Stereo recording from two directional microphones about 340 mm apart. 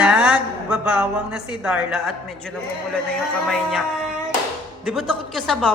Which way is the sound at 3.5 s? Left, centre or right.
Centre.